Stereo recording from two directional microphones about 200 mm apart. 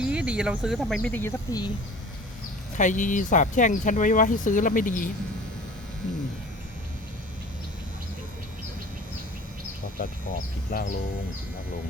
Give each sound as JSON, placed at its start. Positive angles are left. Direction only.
{"t": 0.0, "sound": "speech", "side_deg": -5}
{"t": 2.7, "sound": "speech", "side_deg": 40}
{"t": 10.0, "sound": "speech", "side_deg": 45}